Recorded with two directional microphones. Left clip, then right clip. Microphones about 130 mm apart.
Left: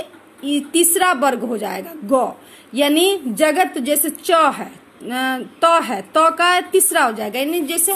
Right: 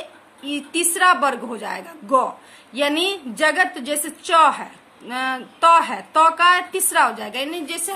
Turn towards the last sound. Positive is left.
turn(degrees=35)  # may be behind; listen again after turning